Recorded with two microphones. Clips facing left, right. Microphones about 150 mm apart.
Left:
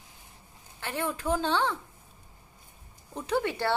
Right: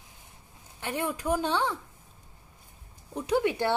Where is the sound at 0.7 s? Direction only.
15° right (ahead or behind).